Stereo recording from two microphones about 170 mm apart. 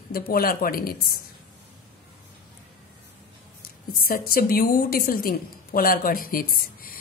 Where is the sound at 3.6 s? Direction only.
60° left (ahead or behind).